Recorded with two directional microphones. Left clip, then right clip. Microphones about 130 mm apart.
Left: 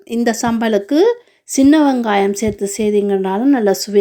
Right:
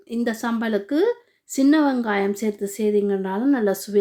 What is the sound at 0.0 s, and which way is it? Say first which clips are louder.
A woman's voice: left 8 dB; 45° left (ahead or behind).